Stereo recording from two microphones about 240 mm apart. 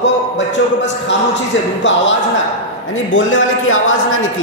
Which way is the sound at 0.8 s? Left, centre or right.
Left.